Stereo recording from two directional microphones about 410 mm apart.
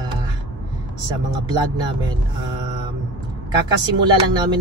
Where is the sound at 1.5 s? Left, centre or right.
Centre.